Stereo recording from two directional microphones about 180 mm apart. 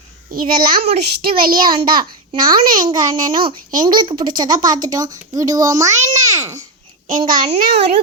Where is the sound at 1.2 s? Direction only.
55° right (ahead or behind).